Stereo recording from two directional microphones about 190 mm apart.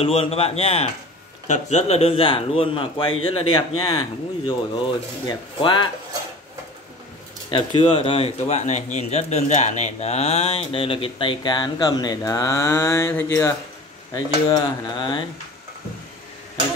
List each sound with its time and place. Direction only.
0.0 s a man's voice: 30° left (ahead or behind)
7.5 s a man's voice: 25° left (ahead or behind)